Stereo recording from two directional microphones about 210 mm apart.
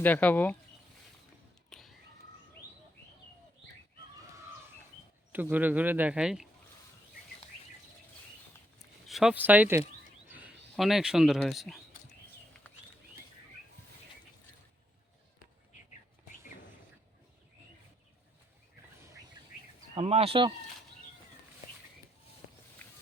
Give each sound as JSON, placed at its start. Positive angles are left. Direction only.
{"t": 0.0, "sound": "speech", "side_deg": 10}
{"t": 5.3, "sound": "a man's voice", "side_deg": -10}
{"t": 9.0, "sound": "a man's voice", "side_deg": 0}
{"t": 12.7, "sound": "bird", "side_deg": 5}
{"t": 18.9, "sound": "a sound", "side_deg": -15}
{"t": 20.0, "sound": "speech", "side_deg": -30}